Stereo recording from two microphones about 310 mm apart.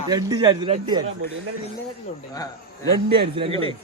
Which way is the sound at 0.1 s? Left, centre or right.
Centre.